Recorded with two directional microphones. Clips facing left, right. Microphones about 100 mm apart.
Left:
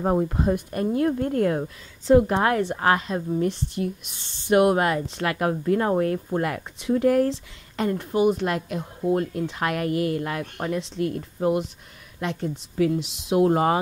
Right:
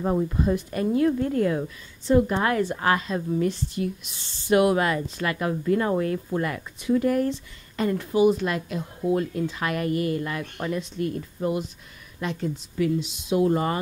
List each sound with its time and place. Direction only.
0.0 s speech: 45° left (ahead or behind)
3.4 s speech: 60° left (ahead or behind)
5.0 s speech: 65° left (ahead or behind)
5.5 s speech: 50° left (ahead or behind)
6.4 s speech: 60° left (ahead or behind)
7.0 s speech: 80° left
8.0 s speech: 50° left (ahead or behind); by 13.7 s 80° left